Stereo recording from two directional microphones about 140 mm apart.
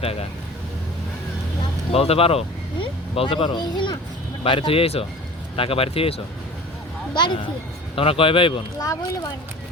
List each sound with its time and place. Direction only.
0.0 s speech: 45° left (ahead or behind)
1.9 s speech: 45° left (ahead or behind)